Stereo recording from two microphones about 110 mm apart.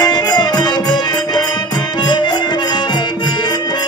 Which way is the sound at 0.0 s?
40° left (ahead or behind).